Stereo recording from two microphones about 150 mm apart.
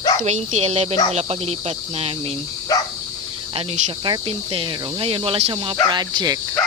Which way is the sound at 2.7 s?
25° left (ahead or behind).